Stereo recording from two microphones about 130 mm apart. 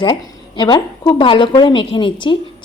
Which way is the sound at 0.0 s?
35° left (ahead or behind).